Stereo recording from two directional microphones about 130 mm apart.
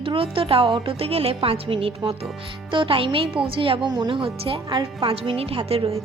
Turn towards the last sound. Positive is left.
turn(degrees=-45)  # may be behind; listen again after turning